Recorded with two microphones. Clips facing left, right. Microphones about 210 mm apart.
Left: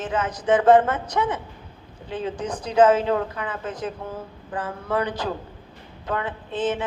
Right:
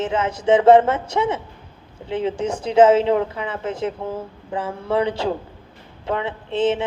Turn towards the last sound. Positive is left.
turn(degrees=-25)  # may be behind; listen again after turning